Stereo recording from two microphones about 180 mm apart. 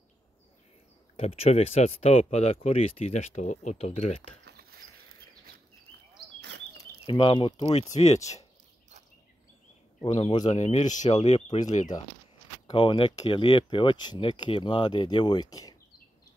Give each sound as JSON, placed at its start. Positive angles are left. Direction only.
{"t": 1.1, "sound": "speech", "side_deg": 35}
{"t": 4.5, "sound": "a sound", "side_deg": -60}
{"t": 7.1, "sound": "speech", "side_deg": 30}
{"t": 10.0, "sound": "speech", "side_deg": 30}
{"t": 12.6, "sound": "speech", "side_deg": 25}